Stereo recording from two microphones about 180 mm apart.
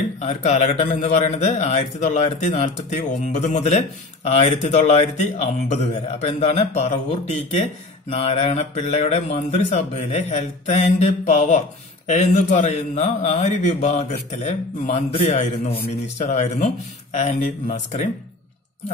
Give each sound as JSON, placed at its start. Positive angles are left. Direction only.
{"t": 0.2, "sound": "a man's voice", "side_deg": 40}